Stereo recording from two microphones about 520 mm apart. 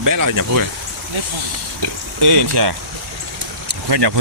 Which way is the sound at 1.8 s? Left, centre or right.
Right.